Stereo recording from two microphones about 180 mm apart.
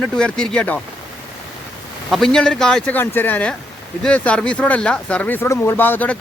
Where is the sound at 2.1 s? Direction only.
Centre (ahead or behind).